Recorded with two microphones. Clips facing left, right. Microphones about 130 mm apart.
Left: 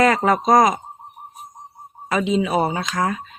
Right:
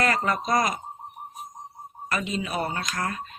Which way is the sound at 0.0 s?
90° left.